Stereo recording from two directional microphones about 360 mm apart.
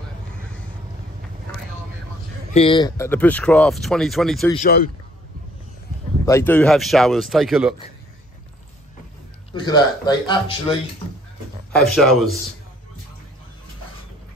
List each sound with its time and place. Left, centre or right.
2.5 s speech: centre
4.5 s speech: left
6.2 s speech: centre
9.5 s speech: centre
11.7 s speech: centre